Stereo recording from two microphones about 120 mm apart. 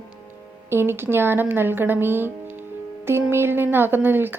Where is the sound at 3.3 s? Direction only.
20° right (ahead or behind).